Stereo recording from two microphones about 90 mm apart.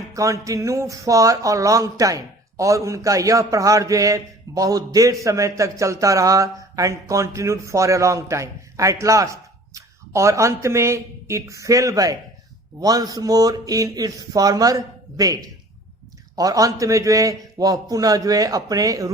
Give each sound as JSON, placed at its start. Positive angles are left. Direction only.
{"t": 0.1, "sound": "a man's voice", "side_deg": -35}